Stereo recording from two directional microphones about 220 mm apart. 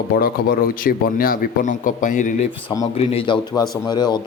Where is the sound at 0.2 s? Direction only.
40° left (ahead or behind).